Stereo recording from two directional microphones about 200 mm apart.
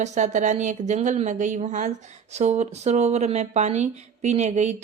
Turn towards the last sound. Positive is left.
turn(degrees=-35)  # may be behind; listen again after turning